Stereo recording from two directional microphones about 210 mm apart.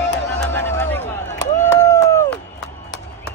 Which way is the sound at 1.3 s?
10° left (ahead or behind).